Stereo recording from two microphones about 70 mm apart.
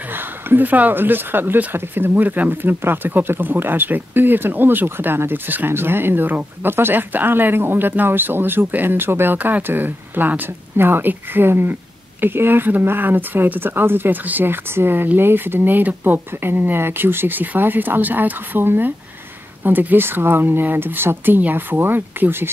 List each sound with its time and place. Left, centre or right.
0.1 s speech: right